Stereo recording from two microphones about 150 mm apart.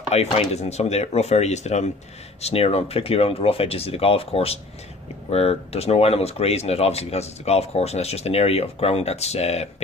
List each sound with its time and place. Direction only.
0.1 s speech: 45° left (ahead or behind)